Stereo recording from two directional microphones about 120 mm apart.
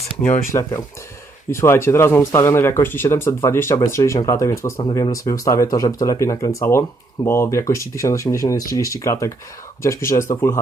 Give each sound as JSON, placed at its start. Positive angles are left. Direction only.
{"t": 0.5, "sound": "speech", "side_deg": 40}
{"t": 1.5, "sound": "speech", "side_deg": 20}
{"t": 4.8, "sound": "speech", "side_deg": 35}